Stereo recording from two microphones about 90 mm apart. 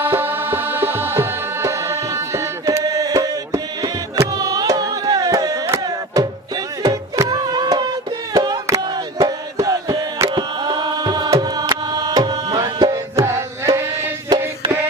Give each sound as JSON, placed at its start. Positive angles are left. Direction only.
{"t": 0.0, "sound": "tabla", "side_deg": -25}
{"t": 4.1, "sound": "music", "side_deg": -40}
{"t": 6.8, "sound": "music", "side_deg": -45}
{"t": 8.3, "sound": "a sound", "side_deg": -45}
{"t": 10.2, "sound": "music", "side_deg": -55}
{"t": 14.3, "sound": "music", "side_deg": -60}